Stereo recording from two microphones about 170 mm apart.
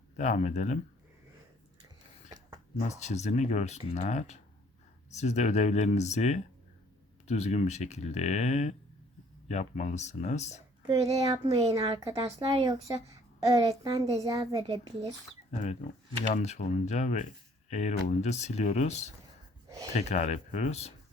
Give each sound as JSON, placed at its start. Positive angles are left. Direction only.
{"t": 0.2, "sound": "speech", "side_deg": 45}
{"t": 3.0, "sound": "speech", "side_deg": 40}
{"t": 10.8, "sound": "a child's voice", "side_deg": -20}
{"t": 15.5, "sound": "speech", "side_deg": 45}
{"t": 19.6, "sound": "a sound", "side_deg": -20}
{"t": 19.9, "sound": "speech", "side_deg": 40}